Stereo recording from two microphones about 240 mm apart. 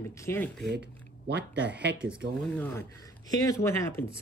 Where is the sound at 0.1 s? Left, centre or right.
Centre.